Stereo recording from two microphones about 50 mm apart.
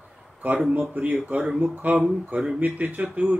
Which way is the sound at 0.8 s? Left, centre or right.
Right.